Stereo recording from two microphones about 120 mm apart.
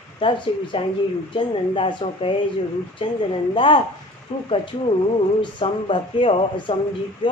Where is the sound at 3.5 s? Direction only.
45° left (ahead or behind).